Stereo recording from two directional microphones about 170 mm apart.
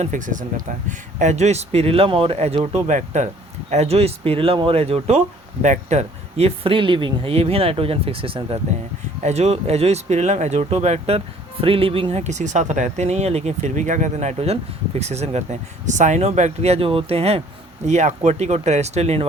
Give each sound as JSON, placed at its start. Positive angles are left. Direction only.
{"t": 0.0, "sound": "speech", "side_deg": -50}